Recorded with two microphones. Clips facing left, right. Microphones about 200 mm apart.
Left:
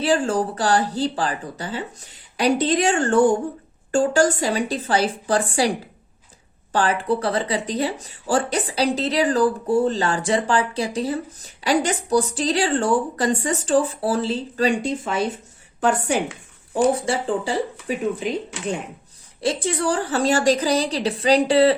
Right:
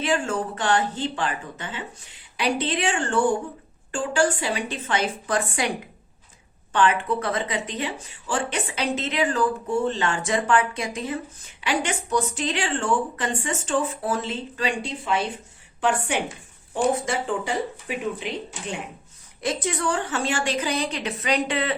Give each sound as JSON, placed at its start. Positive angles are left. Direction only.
{"t": 0.0, "sound": "speech", "side_deg": 35}
{"t": 6.7, "sound": "speech", "side_deg": 35}
{"t": 19.4, "sound": "speech", "side_deg": 30}